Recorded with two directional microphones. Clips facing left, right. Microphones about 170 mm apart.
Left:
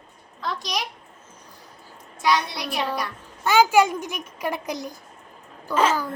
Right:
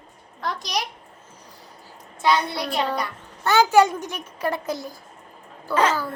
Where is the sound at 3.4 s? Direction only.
10° left (ahead or behind).